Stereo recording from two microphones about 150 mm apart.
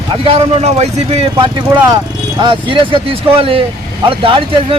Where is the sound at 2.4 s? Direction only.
35° right (ahead or behind).